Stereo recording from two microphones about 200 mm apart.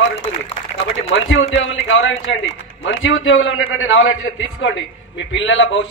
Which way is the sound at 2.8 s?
85° left.